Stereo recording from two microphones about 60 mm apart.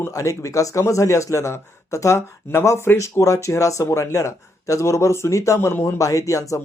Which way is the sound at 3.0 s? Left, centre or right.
Left.